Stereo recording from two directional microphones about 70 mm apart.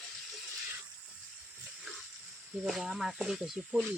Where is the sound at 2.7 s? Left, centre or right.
Centre.